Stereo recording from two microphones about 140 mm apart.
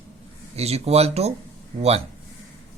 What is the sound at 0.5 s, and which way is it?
Speech, 50° right (ahead or behind).